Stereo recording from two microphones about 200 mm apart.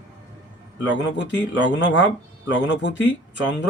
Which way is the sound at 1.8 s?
65° left (ahead or behind).